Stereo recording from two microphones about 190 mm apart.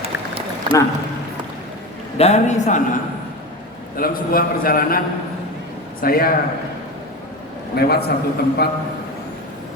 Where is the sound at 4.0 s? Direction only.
50° left (ahead or behind).